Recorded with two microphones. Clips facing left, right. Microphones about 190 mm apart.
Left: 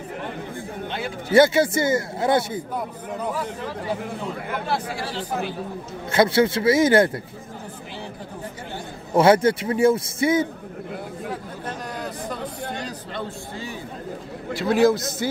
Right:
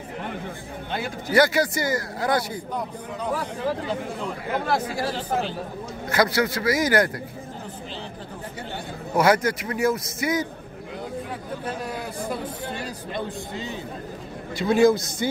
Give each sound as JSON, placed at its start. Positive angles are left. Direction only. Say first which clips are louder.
{"t": 1.3, "sound": "a man's voice", "louder": "left 4 dB", "side_deg": 25}
{"t": 6.1, "sound": "a man's voice", "louder": "left 4 dB", "side_deg": 25}
{"t": 9.1, "sound": "a man's voice", "louder": "left 4 dB", "side_deg": 25}
{"t": 12.7, "sound": "a sound", "louder": "even", "side_deg": -10}
{"t": 14.5, "sound": "a man's voice", "louder": "even", "side_deg": 0}